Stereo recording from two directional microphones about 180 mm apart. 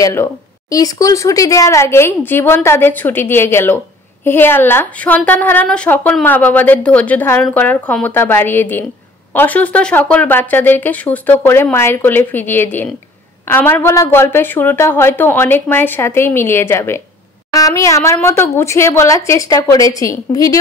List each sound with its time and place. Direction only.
0.0 s speech: 15° left (ahead or behind)